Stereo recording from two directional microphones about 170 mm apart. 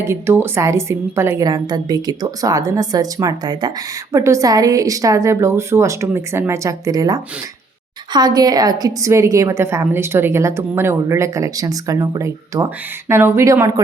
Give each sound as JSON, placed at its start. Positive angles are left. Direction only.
{"t": 0.0, "sound": "a woman's voice", "side_deg": -15}